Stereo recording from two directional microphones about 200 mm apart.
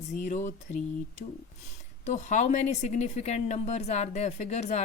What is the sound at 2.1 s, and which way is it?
A woman's voice, 40° left (ahead or behind).